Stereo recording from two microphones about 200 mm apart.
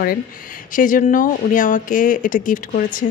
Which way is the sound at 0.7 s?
40° left (ahead or behind).